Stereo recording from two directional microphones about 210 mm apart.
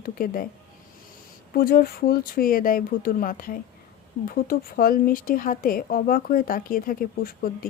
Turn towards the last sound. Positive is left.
turn(degrees=45)  # may be behind; listen again after turning